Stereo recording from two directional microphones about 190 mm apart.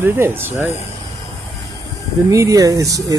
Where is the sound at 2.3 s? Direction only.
15° right (ahead or behind).